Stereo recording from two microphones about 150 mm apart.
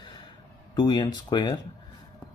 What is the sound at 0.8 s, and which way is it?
Speech, 30° left (ahead or behind).